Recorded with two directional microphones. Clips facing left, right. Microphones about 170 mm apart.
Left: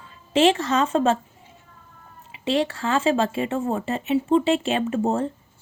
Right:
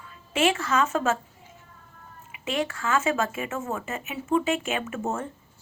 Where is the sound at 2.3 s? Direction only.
30° left (ahead or behind).